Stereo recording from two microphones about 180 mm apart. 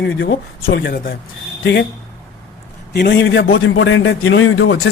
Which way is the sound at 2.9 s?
65° left (ahead or behind).